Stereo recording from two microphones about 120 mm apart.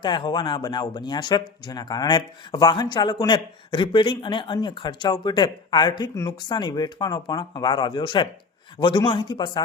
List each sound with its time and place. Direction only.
0.0 s speech: 40° left (ahead or behind)